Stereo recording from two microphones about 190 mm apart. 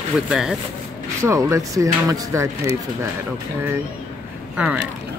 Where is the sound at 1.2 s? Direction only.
15° right (ahead or behind).